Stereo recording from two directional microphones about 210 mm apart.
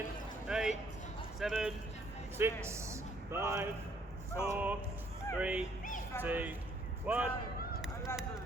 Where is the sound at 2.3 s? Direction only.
10° right (ahead or behind).